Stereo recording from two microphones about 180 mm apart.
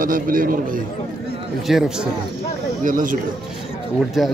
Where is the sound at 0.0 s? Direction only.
50° right (ahead or behind).